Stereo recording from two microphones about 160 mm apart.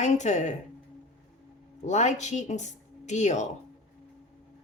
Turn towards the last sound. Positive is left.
turn(degrees=45)  # may be behind; listen again after turning